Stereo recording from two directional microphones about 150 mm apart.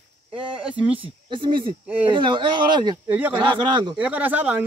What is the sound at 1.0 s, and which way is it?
Speech, 35° right (ahead or behind).